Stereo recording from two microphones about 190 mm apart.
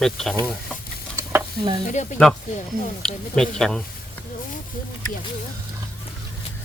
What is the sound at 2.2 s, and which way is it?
Speech, 5° left (ahead or behind).